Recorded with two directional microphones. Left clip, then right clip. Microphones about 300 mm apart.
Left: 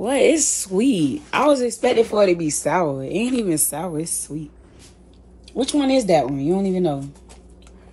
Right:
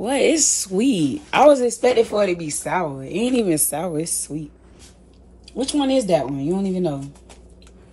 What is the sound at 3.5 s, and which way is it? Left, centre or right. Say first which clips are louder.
Speech: right 2 dB; centre.